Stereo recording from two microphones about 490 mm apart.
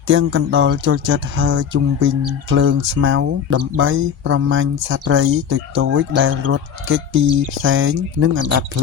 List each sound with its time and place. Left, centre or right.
0.1 s speech: right